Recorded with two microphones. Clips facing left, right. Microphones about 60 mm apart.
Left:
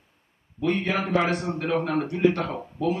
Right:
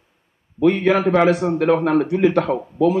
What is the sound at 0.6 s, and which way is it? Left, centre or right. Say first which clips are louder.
Speech: right 9 dB; right.